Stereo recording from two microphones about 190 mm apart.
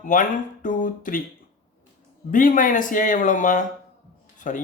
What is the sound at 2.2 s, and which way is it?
Speech, 45° left (ahead or behind).